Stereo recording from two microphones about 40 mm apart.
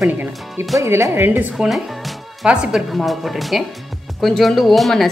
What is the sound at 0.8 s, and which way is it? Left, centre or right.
Speech, right.